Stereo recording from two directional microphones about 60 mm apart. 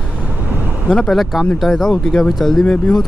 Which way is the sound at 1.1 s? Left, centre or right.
Centre.